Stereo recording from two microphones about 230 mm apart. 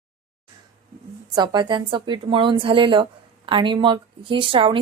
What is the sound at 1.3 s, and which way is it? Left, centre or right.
A woman's voice, centre.